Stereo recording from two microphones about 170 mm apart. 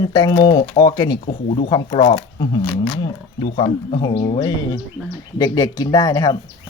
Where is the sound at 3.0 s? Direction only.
35° left (ahead or behind).